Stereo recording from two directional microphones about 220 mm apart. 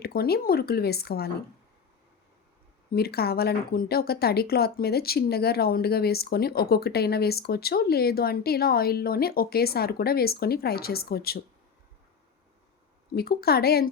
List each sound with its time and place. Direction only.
0.0 s speech: 45° left (ahead or behind)
2.9 s speech: 45° left (ahead or behind)
13.1 s speech: 45° left (ahead or behind)